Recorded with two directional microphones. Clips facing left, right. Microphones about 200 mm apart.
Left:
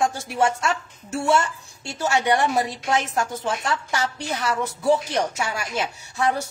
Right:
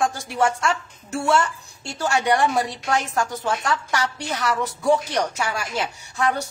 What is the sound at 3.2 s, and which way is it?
Speech, 20° left (ahead or behind).